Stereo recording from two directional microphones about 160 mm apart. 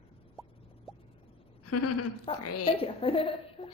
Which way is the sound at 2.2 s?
35° left (ahead or behind).